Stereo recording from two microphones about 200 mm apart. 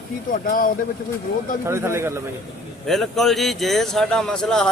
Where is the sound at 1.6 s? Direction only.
15° right (ahead or behind).